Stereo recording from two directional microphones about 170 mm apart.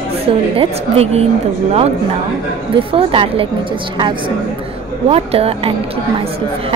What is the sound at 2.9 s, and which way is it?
Speech, 30° right (ahead or behind).